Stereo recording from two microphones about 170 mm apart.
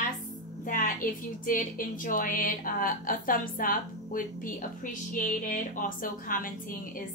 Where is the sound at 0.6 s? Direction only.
55° left (ahead or behind).